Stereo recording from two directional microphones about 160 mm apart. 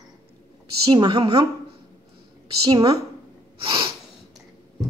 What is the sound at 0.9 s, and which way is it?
Speech, 30° right (ahead or behind).